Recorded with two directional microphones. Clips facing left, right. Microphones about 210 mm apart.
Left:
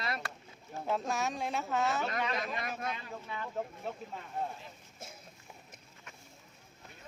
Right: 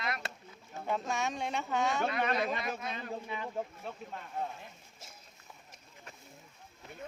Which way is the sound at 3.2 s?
15° right (ahead or behind).